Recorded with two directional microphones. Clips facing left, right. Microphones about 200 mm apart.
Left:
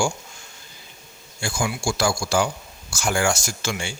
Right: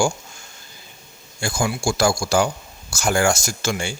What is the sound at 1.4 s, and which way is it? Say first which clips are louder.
A man's voice: right 3 dB; 40° right (ahead or behind).